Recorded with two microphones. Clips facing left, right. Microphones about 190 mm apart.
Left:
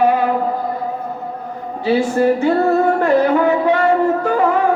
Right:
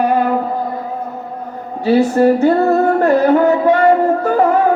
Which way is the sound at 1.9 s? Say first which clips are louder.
Right 3 dB; 40° right (ahead or behind).